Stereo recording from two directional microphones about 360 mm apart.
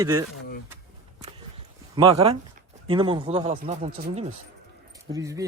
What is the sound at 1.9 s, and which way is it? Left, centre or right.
Speech, centre.